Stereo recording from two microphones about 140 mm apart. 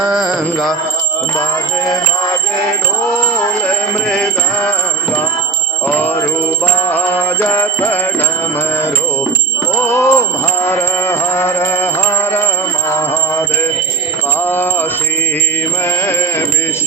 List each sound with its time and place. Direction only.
0.0 s mantra: 5° right (ahead or behind)
4.1 s music: 5° left (ahead or behind)
5.9 s music: 15° left (ahead or behind)
9.8 s music: 15° left (ahead or behind)
13.0 s mantra: 15° left (ahead or behind)
14.4 s music: 15° left (ahead or behind)